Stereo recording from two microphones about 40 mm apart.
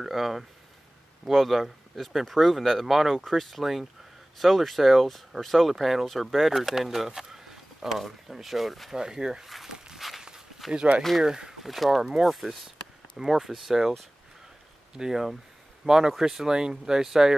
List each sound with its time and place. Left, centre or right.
0.0 s speech: centre
8.9 s speech: centre
9.9 s walk: centre
10.7 s speech: right
11.0 s speech: centre
11.2 s speech: centre
11.6 s speech: centre
15.0 s speech: centre